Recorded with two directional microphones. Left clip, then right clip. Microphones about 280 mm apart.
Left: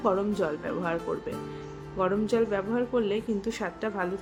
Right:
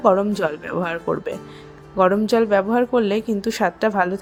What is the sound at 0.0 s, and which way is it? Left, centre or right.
Speech, right.